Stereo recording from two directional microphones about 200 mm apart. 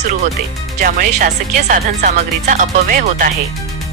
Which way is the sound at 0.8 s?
45° right (ahead or behind).